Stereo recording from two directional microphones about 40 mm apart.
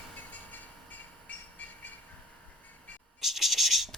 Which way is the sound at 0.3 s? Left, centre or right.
Left.